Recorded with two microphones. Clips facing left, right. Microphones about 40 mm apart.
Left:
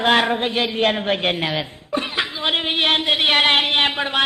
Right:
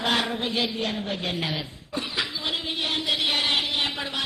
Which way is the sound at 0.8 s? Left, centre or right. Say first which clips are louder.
Left 10 dB; left.